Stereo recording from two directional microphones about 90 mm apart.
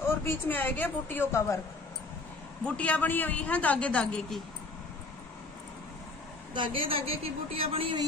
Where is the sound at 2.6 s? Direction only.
15° left (ahead or behind).